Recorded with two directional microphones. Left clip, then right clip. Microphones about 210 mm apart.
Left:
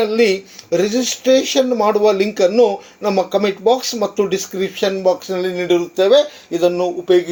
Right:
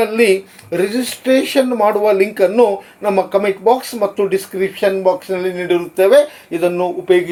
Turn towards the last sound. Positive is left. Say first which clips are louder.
# right 1 dB
turn(degrees=20)  # may be behind; listen again after turning